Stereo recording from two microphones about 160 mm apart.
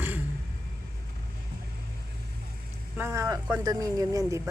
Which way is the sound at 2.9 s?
15° right (ahead or behind).